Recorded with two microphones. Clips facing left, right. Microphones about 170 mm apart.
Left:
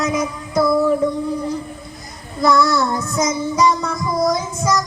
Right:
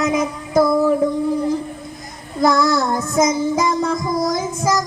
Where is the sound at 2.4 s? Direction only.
50° right (ahead or behind).